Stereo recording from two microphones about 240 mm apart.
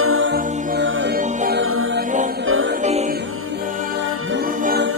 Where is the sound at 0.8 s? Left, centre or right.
Right.